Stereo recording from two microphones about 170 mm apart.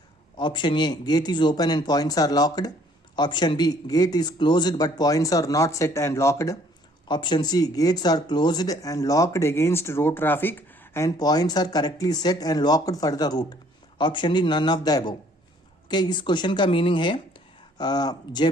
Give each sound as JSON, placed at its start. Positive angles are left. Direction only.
{"t": 0.3, "sound": "speech", "side_deg": 25}